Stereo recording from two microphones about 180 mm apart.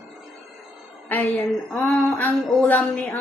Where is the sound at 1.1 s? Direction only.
10° left (ahead or behind).